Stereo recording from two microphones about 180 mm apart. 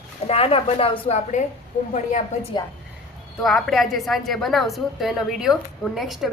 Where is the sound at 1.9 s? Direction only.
40° left (ahead or behind).